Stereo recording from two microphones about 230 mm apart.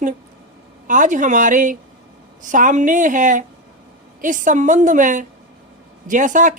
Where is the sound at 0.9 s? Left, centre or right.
Right.